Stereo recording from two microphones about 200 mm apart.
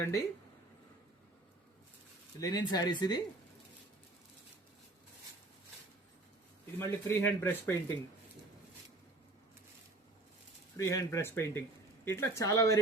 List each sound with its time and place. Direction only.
2.4 s speech: 20° left (ahead or behind)
6.7 s speech: 10° left (ahead or behind)
10.8 s speech: 15° left (ahead or behind)